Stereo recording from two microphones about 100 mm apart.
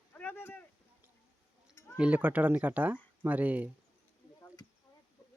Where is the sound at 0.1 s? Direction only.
20° left (ahead or behind).